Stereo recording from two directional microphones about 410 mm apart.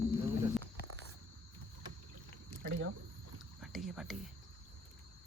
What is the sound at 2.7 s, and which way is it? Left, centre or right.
Speech, right.